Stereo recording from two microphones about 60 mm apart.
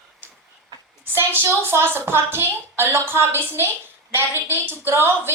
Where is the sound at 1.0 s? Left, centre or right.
Right.